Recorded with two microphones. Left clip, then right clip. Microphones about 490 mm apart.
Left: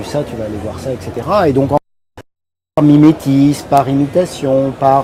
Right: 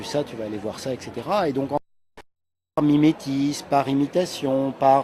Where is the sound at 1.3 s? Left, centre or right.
Centre.